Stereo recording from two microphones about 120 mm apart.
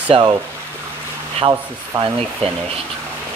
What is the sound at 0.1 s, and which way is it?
Speech, 40° right (ahead or behind).